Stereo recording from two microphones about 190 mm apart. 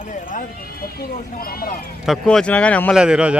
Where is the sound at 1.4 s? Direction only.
50° left (ahead or behind).